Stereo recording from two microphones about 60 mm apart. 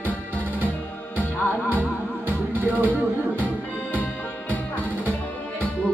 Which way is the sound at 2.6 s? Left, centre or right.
Right.